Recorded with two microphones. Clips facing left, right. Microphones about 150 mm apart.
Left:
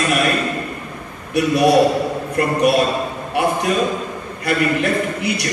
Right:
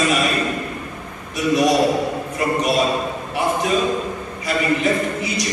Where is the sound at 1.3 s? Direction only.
60° left (ahead or behind).